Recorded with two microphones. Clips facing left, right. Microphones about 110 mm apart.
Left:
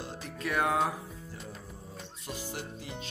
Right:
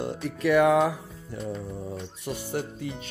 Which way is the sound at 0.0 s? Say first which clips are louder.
Right 10 dB; 65° right (ahead or behind).